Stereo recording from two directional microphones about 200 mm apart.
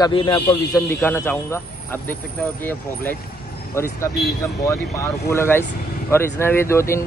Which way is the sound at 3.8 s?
15° left (ahead or behind).